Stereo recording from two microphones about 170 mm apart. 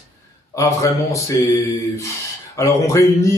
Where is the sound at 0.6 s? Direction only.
20° left (ahead or behind).